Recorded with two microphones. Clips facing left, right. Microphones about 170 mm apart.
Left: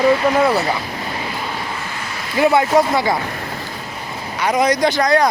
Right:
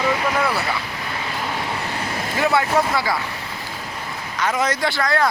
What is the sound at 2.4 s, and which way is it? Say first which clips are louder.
Speech: left 5 dB; 15° left (ahead or behind).